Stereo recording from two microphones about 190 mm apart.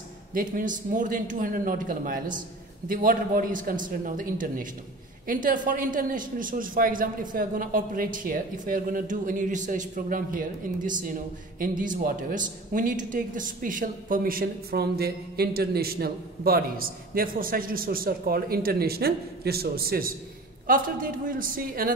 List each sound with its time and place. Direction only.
0.3 s a woman's voice: 50° right (ahead or behind)